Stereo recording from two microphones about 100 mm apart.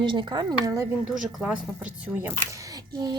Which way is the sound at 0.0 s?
50° right (ahead or behind).